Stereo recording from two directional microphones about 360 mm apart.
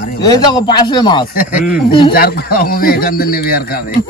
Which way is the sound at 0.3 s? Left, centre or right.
Centre.